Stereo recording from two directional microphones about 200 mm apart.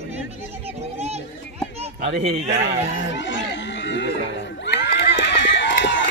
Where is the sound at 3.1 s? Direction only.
65° left (ahead or behind).